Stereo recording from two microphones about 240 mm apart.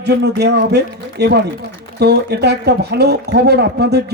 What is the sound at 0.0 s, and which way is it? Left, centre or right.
A man's voice, right.